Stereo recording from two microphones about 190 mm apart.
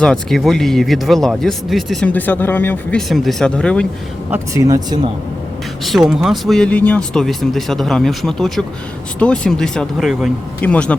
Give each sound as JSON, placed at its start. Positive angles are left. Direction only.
{"t": 0.0, "sound": "speech", "side_deg": 5}
{"t": 4.3, "sound": "speech", "side_deg": -15}
{"t": 5.8, "sound": "speech", "side_deg": 0}